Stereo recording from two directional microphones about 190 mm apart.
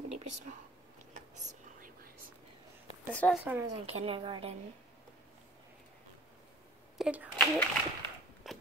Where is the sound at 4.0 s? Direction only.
30° right (ahead or behind).